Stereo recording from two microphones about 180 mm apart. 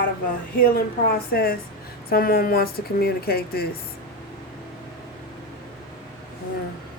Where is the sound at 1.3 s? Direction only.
55° left (ahead or behind).